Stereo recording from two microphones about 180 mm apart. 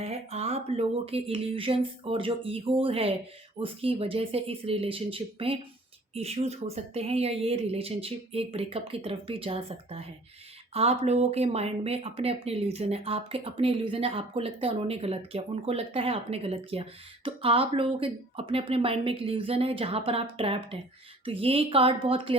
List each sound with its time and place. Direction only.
0.0 s speech: 35° right (ahead or behind)